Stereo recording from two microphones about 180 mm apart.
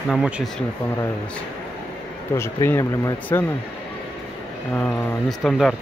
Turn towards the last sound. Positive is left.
turn(degrees=0)  # may be behind; listen again after turning